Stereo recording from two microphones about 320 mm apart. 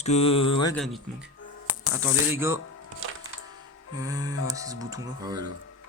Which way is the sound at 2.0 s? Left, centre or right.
Centre.